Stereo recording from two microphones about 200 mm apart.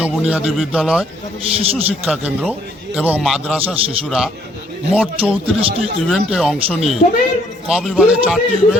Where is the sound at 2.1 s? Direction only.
5° right (ahead or behind).